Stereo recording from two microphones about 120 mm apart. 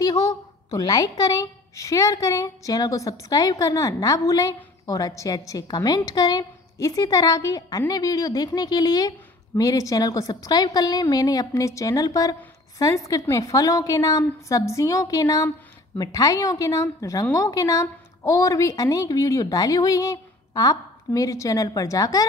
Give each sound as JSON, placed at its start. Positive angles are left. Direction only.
{"t": 0.0, "sound": "a woman's voice", "side_deg": 35}